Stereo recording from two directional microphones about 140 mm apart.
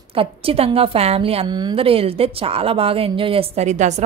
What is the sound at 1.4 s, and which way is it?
A woman's voice, 30° right (ahead or behind).